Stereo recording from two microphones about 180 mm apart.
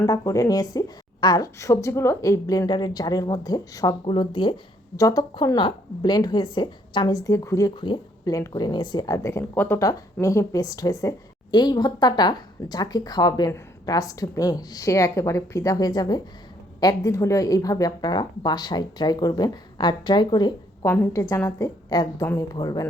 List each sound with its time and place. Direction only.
0.0 s a woman's voice: 20° left (ahead or behind)
20.8 s a woman's voice: 15° left (ahead or behind)